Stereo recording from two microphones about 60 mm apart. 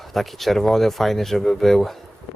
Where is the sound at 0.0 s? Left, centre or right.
Centre.